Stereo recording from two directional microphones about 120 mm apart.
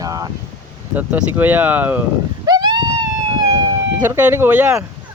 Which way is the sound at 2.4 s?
35° right (ahead or behind).